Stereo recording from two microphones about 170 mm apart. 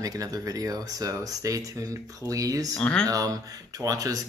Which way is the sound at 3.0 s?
20° right (ahead or behind).